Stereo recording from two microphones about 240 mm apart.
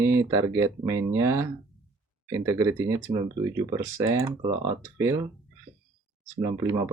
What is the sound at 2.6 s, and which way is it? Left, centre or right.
Speech, centre.